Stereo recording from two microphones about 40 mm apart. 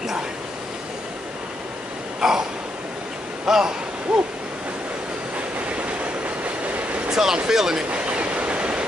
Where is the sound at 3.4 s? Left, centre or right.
Centre.